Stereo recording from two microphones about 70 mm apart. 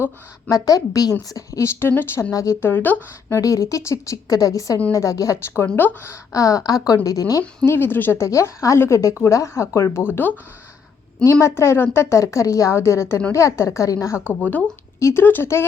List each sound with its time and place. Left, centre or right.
0.5 s a woman's voice: left
1.8 s a woman's voice: left
2.3 s a woman's voice: left
2.6 s speech: left
3.2 s a woman's voice: left
5.6 s speech: left
6.3 s speech: left
7.7 s a woman's voice: left
8.2 s a woman's voice: left
10.0 s speech: left
11.2 s a woman's voice: left
14.3 s speech: left
14.9 s speech: left
15.2 s speech: left